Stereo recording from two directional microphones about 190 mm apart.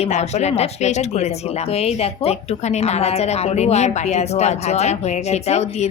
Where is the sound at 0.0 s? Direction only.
35° left (ahead or behind).